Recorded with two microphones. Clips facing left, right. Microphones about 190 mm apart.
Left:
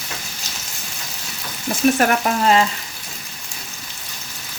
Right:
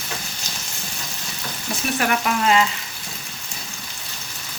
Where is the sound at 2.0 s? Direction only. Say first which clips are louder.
Left 3 dB; 40° left (ahead or behind).